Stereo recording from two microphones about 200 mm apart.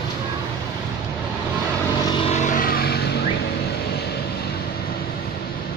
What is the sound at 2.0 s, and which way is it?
Vehicle, 30° left (ahead or behind).